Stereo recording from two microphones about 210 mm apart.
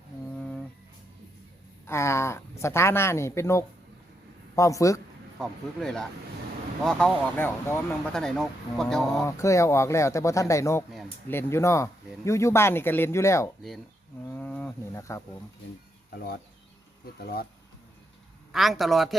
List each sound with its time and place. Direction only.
0.3 s music: 5° left (ahead or behind)
1.9 s speech: 10° left (ahead or behind)
5.4 s speech: 5° left (ahead or behind)
9.2 s speech: 15° left (ahead or behind)
14.3 s a sound: 10° left (ahead or behind)
16.1 s speech: 50° left (ahead or behind)
18.5 s speech: centre (ahead or behind)